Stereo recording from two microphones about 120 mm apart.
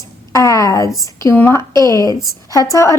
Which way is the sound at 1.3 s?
20° left (ahead or behind).